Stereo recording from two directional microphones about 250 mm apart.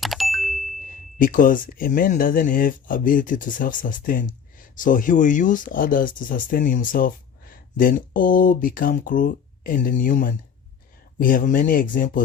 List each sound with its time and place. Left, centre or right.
0.0 s ding: centre
0.8 s speech: left